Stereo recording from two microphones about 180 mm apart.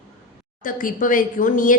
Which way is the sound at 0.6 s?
50° left (ahead or behind).